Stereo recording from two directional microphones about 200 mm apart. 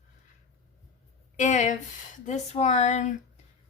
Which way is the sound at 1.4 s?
35° left (ahead or behind).